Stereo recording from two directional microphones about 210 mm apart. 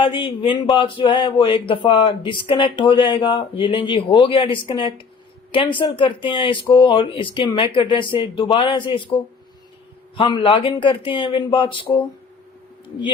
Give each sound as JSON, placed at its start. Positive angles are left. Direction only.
{"t": 0.0, "sound": "speech", "side_deg": 25}
{"t": 10.2, "sound": "speech", "side_deg": 20}